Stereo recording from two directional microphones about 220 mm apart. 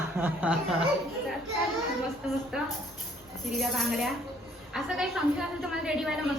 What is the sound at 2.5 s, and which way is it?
A woman's voice, 5° right (ahead or behind).